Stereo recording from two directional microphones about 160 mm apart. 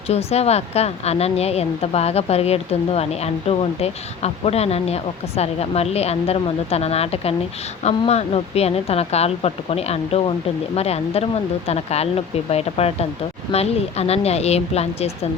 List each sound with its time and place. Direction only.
0.1 s speech: 40° left (ahead or behind)